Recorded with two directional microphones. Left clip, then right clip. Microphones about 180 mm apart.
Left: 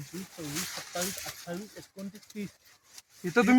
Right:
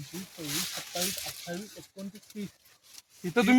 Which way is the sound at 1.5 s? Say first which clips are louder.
Even; 5° right (ahead or behind).